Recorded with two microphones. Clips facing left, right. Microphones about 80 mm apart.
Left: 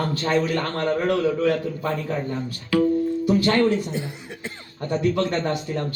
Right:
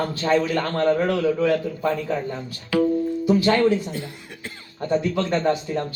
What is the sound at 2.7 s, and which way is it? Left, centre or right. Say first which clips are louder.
Music: even; right.